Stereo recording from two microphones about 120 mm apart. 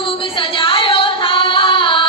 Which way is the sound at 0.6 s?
45° left (ahead or behind).